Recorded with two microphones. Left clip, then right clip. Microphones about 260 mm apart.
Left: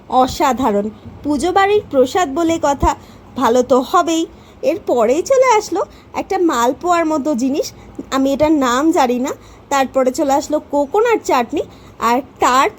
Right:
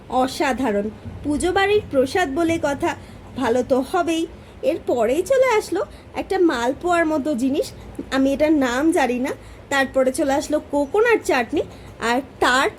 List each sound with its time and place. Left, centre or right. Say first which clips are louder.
0.1 s a woman's voice: left 7 dB; centre